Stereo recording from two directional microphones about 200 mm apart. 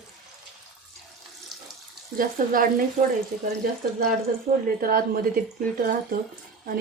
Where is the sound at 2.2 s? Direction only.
45° right (ahead or behind).